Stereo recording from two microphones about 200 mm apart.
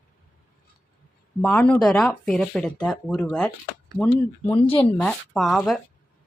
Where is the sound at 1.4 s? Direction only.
5° left (ahead or behind).